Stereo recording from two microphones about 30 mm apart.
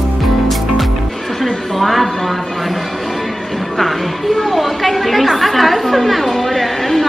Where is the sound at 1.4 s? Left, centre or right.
Centre.